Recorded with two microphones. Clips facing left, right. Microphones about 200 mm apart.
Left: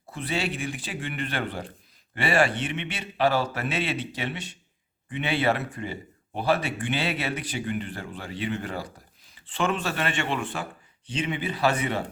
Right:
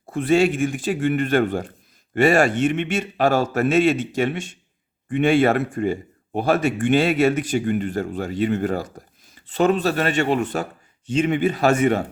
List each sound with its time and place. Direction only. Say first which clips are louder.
0.0 s speech: right 12 dB; 50° right (ahead or behind)